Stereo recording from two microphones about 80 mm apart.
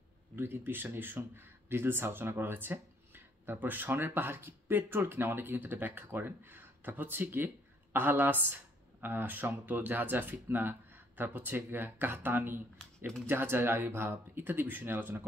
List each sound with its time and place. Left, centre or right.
0.4 s speech: right